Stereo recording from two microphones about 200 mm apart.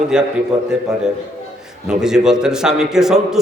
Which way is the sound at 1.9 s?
5° right (ahead or behind).